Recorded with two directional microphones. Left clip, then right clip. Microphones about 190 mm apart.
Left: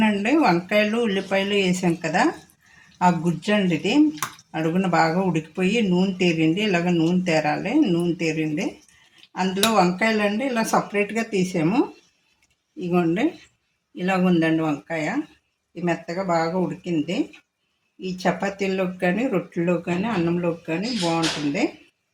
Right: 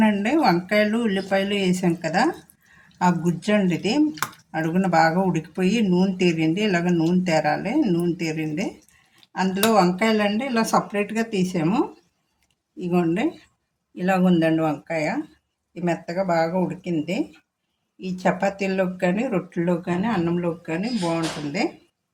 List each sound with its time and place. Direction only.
0.0 s speech: 15° left (ahead or behind)
12.9 s speech: 15° left (ahead or behind)
13.9 s speech: centre (ahead or behind)